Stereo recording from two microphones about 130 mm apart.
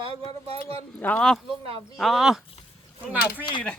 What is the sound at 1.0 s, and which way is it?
Speech, 10° left (ahead or behind).